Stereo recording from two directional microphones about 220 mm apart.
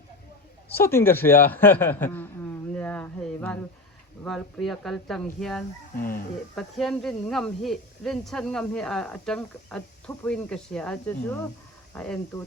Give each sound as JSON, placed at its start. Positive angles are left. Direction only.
{"t": 0.7, "sound": "speech", "side_deg": 10}
{"t": 5.9, "sound": "speech", "side_deg": 40}
{"t": 6.6, "sound": "speech", "side_deg": 0}